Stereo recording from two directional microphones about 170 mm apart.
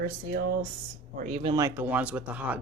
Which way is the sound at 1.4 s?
20° right (ahead or behind).